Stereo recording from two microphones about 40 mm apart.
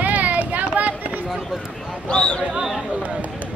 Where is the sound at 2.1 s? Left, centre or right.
Left.